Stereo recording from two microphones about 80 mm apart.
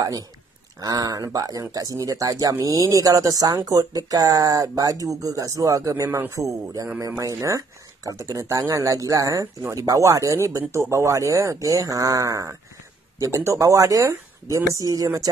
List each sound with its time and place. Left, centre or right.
0.7 s speech: right